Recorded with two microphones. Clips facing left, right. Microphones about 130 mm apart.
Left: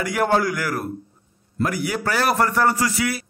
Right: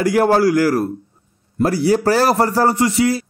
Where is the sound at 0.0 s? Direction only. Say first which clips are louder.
Right 6 dB; 35° right (ahead or behind).